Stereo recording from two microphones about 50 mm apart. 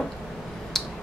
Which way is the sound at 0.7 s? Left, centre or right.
Centre.